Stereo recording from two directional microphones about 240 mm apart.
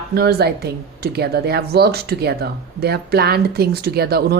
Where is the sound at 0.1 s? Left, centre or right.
Right.